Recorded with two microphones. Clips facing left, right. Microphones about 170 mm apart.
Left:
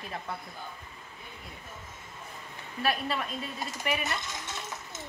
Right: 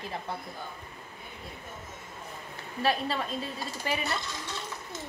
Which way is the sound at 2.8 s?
30° right (ahead or behind).